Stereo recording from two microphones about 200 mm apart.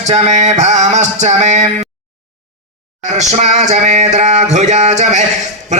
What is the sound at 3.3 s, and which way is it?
A man's voice, 35° right (ahead or behind).